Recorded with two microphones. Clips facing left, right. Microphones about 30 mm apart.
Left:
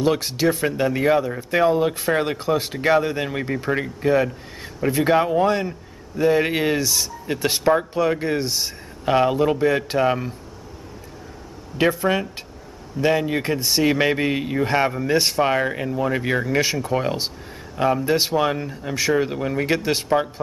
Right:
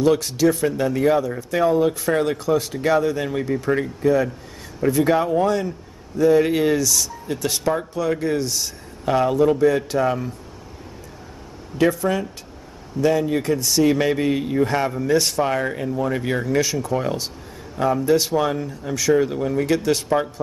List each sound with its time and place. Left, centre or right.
0.0 s a man's voice: left
11.8 s a man's voice: left
16.6 s a man's voice: left